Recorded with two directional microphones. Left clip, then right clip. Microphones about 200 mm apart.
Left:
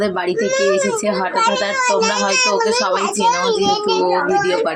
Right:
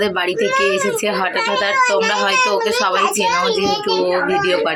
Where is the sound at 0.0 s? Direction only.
Centre (ahead or behind).